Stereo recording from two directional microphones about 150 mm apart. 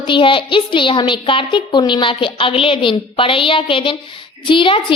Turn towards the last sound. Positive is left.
turn(degrees=35)  # may be behind; listen again after turning